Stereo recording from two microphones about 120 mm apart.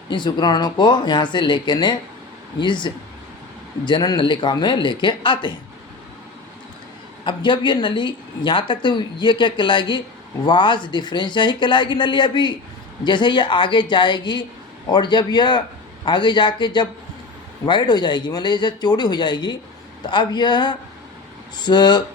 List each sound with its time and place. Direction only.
0.1 s speech: 40° left (ahead or behind)
7.3 s speech: 40° left (ahead or behind)